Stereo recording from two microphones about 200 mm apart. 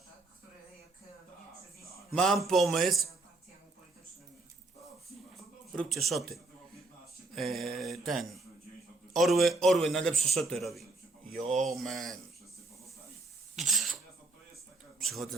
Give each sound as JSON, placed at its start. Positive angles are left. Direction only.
{"t": 2.1, "sound": "a man's voice", "side_deg": 0}
{"t": 5.4, "sound": "a man's voice", "side_deg": 0}
{"t": 11.3, "sound": "speech", "side_deg": -30}
{"t": 11.6, "sound": "a man's voice", "side_deg": 0}
{"t": 13.6, "sound": "a sound", "side_deg": 0}
{"t": 15.0, "sound": "a man's voice", "side_deg": 0}